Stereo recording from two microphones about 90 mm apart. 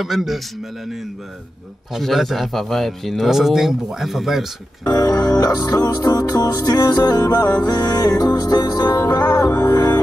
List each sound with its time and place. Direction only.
0.0 s speech: 5° right (ahead or behind)
2.0 s speech: centre (ahead or behind)
4.8 s music: 45° left (ahead or behind)